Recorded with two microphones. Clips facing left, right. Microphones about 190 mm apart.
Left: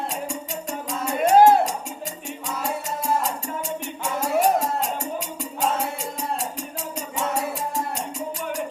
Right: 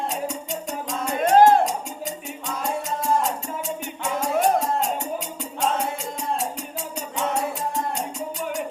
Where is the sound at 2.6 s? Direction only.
Centre (ahead or behind).